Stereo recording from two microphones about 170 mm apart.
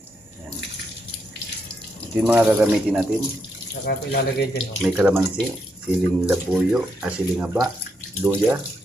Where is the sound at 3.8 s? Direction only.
70° left (ahead or behind).